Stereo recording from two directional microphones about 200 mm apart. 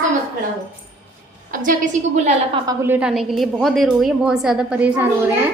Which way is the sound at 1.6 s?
40° right (ahead or behind).